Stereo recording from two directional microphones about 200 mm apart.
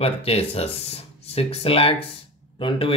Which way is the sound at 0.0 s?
30° left (ahead or behind).